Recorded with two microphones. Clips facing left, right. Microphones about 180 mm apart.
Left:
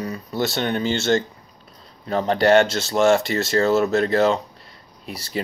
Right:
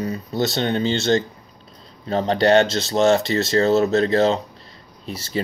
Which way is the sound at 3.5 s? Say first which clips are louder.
Right 1 dB; 35° right (ahead or behind).